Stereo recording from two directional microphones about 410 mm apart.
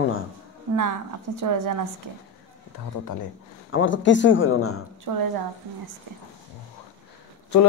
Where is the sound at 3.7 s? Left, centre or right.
Left.